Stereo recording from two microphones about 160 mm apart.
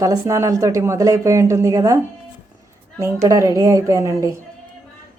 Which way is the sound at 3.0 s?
20° right (ahead or behind).